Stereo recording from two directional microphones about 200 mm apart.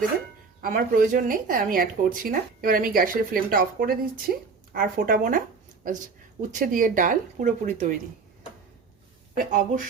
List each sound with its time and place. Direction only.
0.6 s speech: 45° right (ahead or behind)
9.3 s speech: 40° right (ahead or behind)